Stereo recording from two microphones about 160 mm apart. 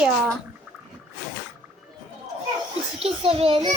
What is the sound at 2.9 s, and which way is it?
Speech, 40° right (ahead or behind).